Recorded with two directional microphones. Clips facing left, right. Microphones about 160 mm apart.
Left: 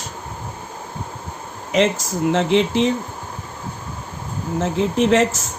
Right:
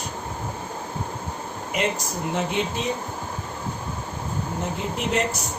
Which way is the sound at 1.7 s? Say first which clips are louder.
Left 8 dB; 90° left.